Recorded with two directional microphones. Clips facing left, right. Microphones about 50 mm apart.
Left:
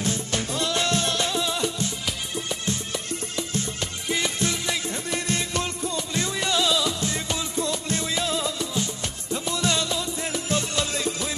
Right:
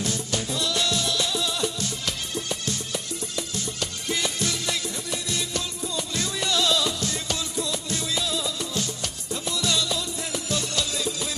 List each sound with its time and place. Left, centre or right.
0.3 s music: left
3.1 s music: left
5.1 s music: left; by 7.0 s centre
7.0 s music: left